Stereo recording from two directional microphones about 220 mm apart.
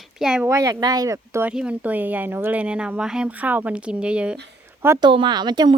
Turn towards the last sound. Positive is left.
turn(degrees=-20)  # may be behind; listen again after turning